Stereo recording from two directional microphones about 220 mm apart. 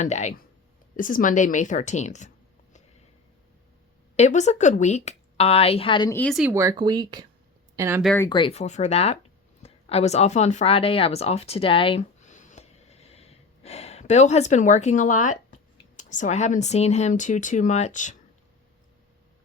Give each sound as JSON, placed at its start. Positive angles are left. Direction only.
{"t": 0.0, "sound": "speech", "side_deg": 30}
{"t": 4.2, "sound": "a woman's voice", "side_deg": 30}
{"t": 6.1, "sound": "speech", "side_deg": 0}
{"t": 6.5, "sound": "speech", "side_deg": -15}
{"t": 8.0, "sound": "speech", "side_deg": 5}
{"t": 8.3, "sound": "a woman's voice", "side_deg": 25}